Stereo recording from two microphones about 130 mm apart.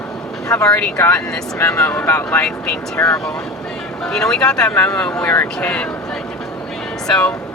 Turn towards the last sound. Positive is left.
turn(degrees=5)  # may be behind; listen again after turning